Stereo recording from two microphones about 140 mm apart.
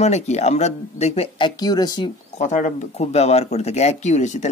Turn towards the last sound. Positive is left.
turn(degrees=55)  # may be behind; listen again after turning